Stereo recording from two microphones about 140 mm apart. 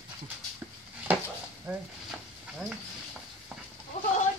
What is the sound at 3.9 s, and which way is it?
Goat, 50° left (ahead or behind).